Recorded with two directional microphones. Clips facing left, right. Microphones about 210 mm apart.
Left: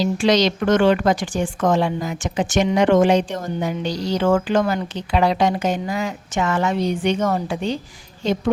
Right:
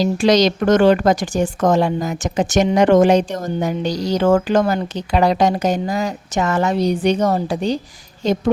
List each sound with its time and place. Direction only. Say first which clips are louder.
0.0 s speech: right 3 dB; 40° right (ahead or behind)